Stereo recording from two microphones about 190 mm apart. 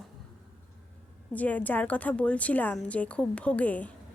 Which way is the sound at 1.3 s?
10° left (ahead or behind).